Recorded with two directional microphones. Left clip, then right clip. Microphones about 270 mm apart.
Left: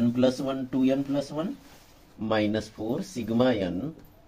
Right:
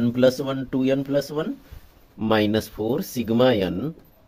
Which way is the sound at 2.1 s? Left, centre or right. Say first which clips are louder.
Right 5 dB; right.